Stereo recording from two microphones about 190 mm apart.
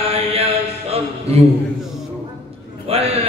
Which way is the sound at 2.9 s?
30° right (ahead or behind).